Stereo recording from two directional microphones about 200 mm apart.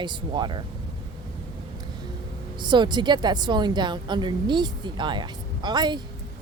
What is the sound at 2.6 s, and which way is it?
A woman's voice, 25° right (ahead or behind).